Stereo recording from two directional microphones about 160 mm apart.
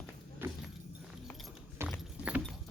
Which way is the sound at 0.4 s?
15° right (ahead or behind).